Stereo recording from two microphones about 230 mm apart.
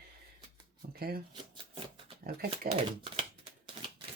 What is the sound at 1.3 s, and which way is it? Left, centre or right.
Shuffling cards, right.